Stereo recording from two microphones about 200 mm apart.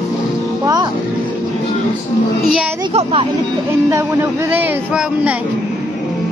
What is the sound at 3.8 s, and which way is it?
Speech, 15° right (ahead or behind).